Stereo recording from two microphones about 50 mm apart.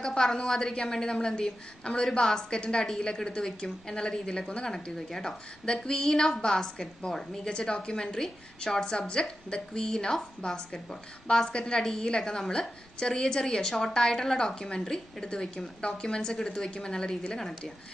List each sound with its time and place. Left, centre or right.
0.0 s a woman's voice: centre